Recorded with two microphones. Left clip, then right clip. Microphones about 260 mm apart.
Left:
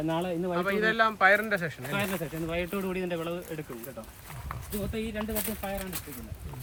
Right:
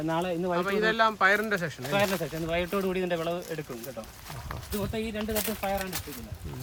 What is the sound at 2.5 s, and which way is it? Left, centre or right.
Speech, right.